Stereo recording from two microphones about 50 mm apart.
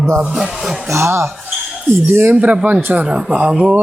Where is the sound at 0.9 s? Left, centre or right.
Right.